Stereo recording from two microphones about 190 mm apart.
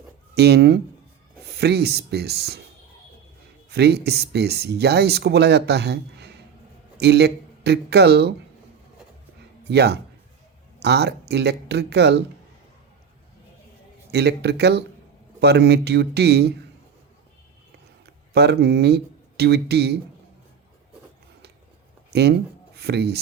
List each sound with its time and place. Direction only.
0.3 s speech: 60° right (ahead or behind)
3.7 s speech: 60° right (ahead or behind)
9.6 s speech: 60° right (ahead or behind)
14.1 s speech: 60° right (ahead or behind)
18.0 s speech: 60° right (ahead or behind)
22.1 s speech: 60° right (ahead or behind)